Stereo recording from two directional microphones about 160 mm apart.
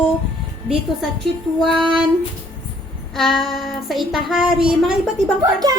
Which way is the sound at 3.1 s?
Centre (ahead or behind).